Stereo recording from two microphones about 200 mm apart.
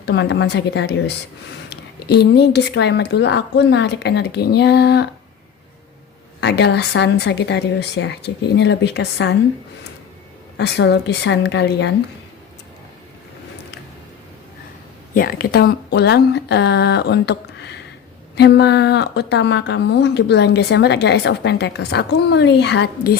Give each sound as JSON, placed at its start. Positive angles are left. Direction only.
{"t": 0.0, "sound": "a woman's voice", "side_deg": 60}
{"t": 6.4, "sound": "a woman's voice", "side_deg": 55}
{"t": 10.6, "sound": "a woman's voice", "side_deg": 55}
{"t": 15.1, "sound": "a woman's voice", "side_deg": 45}